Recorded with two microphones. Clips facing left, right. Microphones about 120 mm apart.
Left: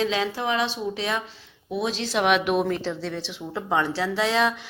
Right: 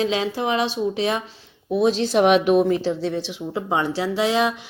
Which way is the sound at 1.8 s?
50° right (ahead or behind).